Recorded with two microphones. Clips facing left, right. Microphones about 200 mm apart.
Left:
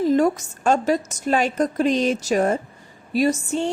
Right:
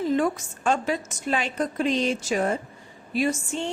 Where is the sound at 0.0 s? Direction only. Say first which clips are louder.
Left 5 dB; 40° left (ahead or behind).